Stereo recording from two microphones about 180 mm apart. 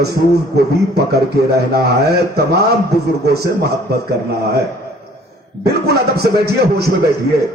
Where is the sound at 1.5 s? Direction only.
60° right (ahead or behind).